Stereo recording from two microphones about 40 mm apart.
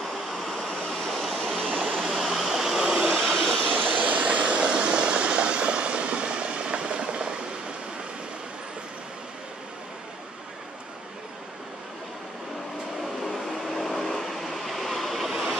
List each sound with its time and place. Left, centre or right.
0.4 s waves: centre
1.6 s waterfall: centre
2.0 s a sound: centre
3.1 s a sound: centre
3.9 s vehicle: right
13.2 s vehicle: centre